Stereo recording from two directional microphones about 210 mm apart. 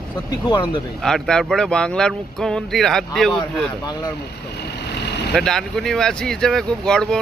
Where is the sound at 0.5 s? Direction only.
20° left (ahead or behind).